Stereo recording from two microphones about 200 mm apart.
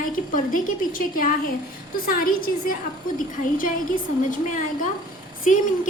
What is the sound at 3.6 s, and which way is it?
A woman's voice, 40° left (ahead or behind).